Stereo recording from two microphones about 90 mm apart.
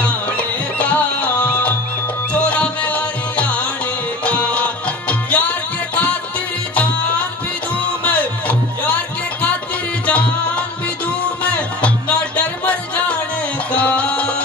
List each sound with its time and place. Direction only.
0.0 s music: 15° left (ahead or behind)
8.0 s music: 15° left (ahead or behind)
10.0 s music: 15° left (ahead or behind)